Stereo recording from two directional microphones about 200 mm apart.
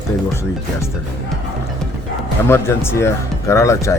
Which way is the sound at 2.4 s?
10° left (ahead or behind).